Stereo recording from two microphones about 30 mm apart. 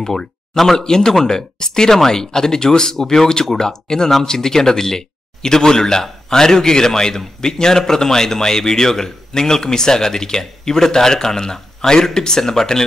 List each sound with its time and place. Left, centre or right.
0.0 s speech: centre